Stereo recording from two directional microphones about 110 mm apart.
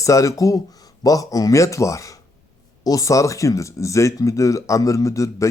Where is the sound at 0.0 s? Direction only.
30° left (ahead or behind).